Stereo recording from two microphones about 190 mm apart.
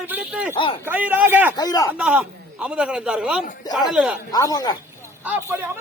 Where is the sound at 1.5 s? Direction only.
20° left (ahead or behind).